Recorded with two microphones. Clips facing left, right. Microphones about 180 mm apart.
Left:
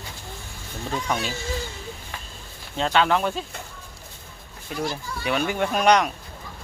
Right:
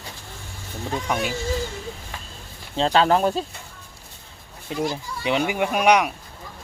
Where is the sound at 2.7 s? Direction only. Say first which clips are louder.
Right 3 dB; 30° right (ahead or behind).